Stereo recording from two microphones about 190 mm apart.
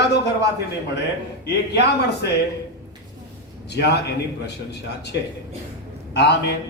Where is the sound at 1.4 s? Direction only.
60° left (ahead or behind).